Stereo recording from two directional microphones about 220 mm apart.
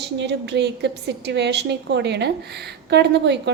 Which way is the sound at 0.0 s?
50° right (ahead or behind).